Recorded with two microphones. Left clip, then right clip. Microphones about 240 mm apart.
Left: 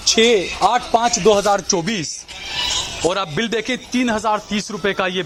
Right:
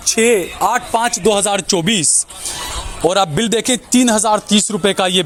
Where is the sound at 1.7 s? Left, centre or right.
Right.